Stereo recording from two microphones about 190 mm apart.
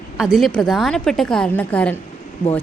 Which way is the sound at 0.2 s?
Centre (ahead or behind).